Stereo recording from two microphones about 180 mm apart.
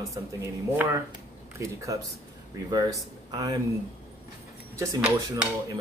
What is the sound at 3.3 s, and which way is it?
Speech, 20° right (ahead or behind).